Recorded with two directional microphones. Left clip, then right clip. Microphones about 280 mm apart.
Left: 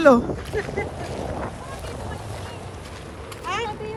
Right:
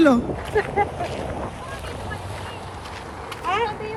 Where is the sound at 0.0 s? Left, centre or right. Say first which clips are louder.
Left 2 dB; centre.